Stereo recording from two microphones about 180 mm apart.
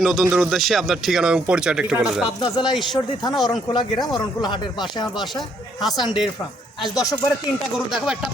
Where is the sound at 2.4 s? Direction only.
25° left (ahead or behind).